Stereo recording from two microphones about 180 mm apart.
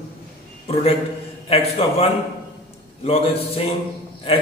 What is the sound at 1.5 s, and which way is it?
A man's voice, 35° left (ahead or behind).